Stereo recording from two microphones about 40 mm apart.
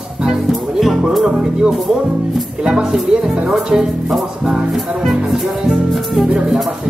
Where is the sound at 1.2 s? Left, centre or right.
Centre.